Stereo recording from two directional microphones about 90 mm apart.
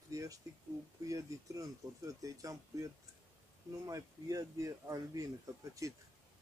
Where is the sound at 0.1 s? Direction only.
40° right (ahead or behind).